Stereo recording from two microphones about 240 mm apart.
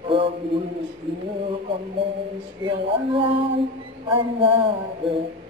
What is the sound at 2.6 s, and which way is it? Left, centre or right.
Music, right.